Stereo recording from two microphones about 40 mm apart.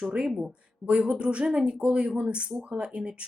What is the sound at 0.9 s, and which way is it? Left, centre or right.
Speech, right.